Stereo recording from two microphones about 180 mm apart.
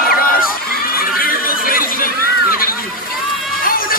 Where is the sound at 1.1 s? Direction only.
55° left (ahead or behind).